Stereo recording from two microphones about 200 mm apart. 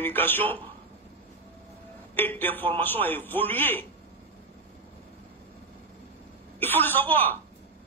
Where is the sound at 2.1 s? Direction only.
10° left (ahead or behind).